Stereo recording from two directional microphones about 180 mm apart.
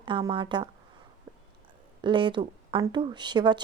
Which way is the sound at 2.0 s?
25° right (ahead or behind).